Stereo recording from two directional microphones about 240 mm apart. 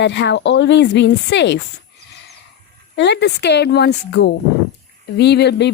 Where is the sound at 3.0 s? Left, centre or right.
Left.